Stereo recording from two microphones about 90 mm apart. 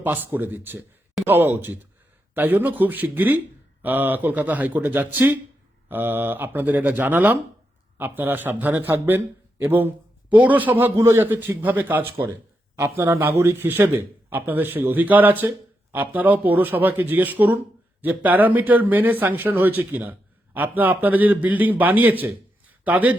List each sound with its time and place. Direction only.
0.0 s a man's voice: 20° right (ahead or behind)
12.7 s a man's voice: 35° right (ahead or behind); by 23.1 s 20° right (ahead or behind)